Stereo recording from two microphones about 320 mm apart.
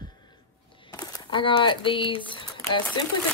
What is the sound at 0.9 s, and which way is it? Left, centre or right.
Speech, centre.